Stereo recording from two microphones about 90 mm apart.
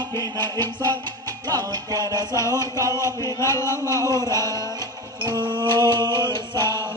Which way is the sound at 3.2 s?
35° left (ahead or behind).